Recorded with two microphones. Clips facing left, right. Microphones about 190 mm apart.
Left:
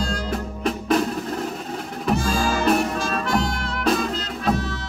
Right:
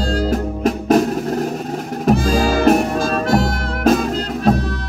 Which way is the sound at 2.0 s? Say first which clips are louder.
Right 6 dB; 40° right (ahead or behind).